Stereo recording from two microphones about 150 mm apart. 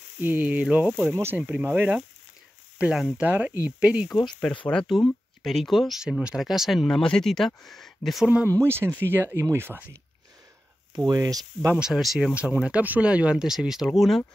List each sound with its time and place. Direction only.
0.2 s speech: 10° right (ahead or behind)
8.5 s speech: 15° right (ahead or behind)
11.1 s speech: 25° right (ahead or behind)
11.7 s speech: 5° right (ahead or behind)